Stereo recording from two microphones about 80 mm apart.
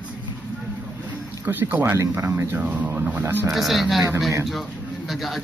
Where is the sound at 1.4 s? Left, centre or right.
Right.